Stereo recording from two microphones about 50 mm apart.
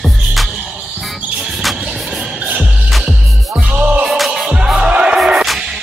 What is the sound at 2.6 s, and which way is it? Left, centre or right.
Music, centre.